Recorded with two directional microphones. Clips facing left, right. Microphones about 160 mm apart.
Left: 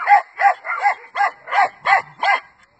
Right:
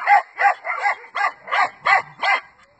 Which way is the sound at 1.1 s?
45° left (ahead or behind).